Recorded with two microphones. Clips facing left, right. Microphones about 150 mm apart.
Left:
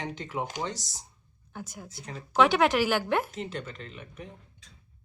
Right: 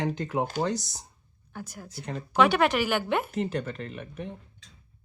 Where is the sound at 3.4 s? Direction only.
40° right (ahead or behind).